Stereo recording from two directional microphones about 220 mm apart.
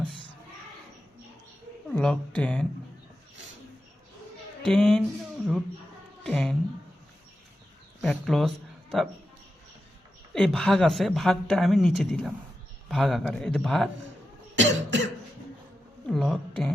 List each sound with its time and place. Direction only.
1.9 s speech: 5° left (ahead or behind)
4.6 s a woman's voice: centre (ahead or behind)
6.2 s a woman's voice: 5° left (ahead or behind)
8.0 s speech: centre (ahead or behind)
10.3 s a woman's voice: centre (ahead or behind)
14.5 s cough: 55° right (ahead or behind)
16.0 s a sound: centre (ahead or behind)